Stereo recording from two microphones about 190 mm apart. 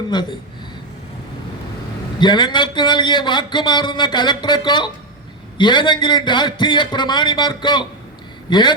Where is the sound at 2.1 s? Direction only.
25° left (ahead or behind).